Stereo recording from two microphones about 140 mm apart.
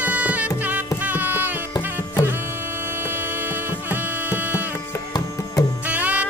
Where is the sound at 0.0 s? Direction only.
10° right (ahead or behind).